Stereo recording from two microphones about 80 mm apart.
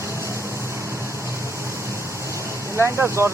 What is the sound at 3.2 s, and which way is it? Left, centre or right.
Speech, right.